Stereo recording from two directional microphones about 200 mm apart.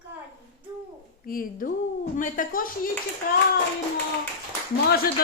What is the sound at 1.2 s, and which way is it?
Speech, 45° left (ahead or behind).